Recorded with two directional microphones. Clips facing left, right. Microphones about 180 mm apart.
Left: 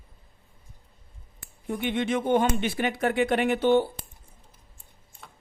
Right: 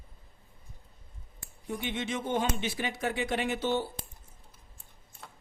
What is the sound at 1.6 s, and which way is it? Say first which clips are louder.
Speech: left 7 dB; 60° left (ahead or behind).